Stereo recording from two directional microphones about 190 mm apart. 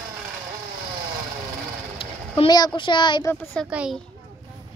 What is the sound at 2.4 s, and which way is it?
Speech, 20° left (ahead or behind).